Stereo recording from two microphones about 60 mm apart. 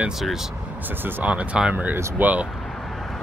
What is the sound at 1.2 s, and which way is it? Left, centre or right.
Speech, centre.